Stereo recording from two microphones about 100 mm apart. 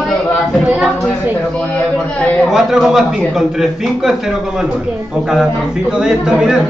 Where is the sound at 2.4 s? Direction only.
5° right (ahead or behind).